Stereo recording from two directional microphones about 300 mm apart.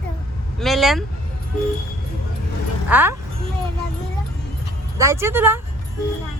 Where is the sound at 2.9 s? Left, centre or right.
Centre.